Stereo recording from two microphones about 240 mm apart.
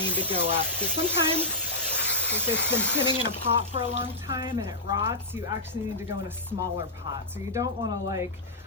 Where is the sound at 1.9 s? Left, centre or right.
Left.